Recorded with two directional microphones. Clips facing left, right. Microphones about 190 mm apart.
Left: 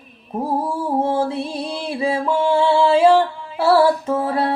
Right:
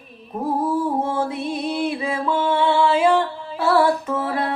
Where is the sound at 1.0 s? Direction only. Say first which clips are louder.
Left 3 dB; 30° left (ahead or behind).